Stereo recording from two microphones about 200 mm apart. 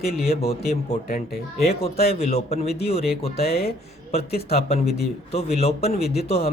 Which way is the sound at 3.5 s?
50° left (ahead or behind).